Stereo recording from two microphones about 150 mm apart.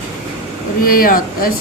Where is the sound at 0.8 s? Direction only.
75° left (ahead or behind).